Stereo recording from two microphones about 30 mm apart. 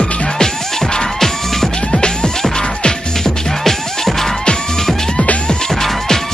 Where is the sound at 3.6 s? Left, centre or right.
Centre.